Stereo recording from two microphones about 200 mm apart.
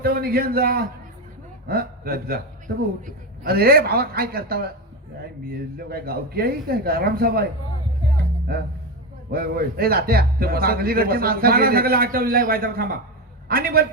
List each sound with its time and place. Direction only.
0.0 s a man's voice: 50° right (ahead or behind)
9.3 s speech: 50° right (ahead or behind)